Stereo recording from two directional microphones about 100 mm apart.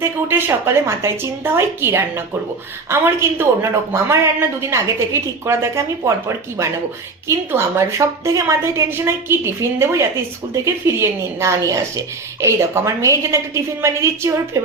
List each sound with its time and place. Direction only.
0.0 s a woman's voice: 20° right (ahead or behind)